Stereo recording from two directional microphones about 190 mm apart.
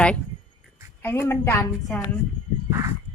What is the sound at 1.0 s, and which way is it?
A woman's voice, 10° left (ahead or behind).